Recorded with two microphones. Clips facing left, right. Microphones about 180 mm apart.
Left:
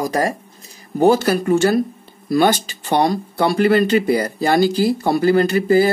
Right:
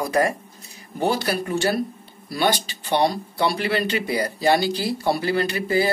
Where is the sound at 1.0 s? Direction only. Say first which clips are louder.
Left 8 dB; 45° left (ahead or behind).